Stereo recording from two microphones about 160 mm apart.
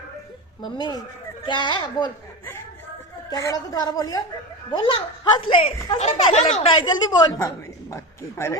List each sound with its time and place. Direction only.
0.6 s a woman's voice: 25° left (ahead or behind)
3.2 s a woman's voice: 25° left (ahead or behind); by 7.0 s 40° left (ahead or behind)
7.1 s a woman's voice: 25° left (ahead or behind)